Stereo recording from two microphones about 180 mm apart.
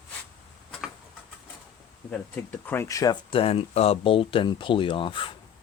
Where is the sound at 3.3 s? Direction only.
30° left (ahead or behind).